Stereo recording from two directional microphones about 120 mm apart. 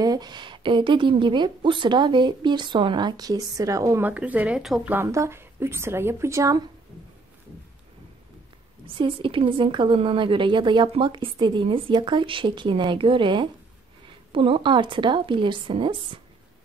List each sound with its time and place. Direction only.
0.0 s a woman's voice: 35° right (ahead or behind)
4.0 s speech: 15° right (ahead or behind)
4.9 s speech: 25° right (ahead or behind)
8.8 s a woman's voice: 45° right (ahead or behind)